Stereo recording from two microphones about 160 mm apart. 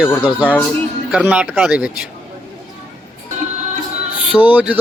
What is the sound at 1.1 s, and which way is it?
Speech, 5° right (ahead or behind).